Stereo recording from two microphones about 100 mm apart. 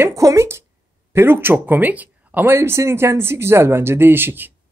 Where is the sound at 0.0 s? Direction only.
30° right (ahead or behind).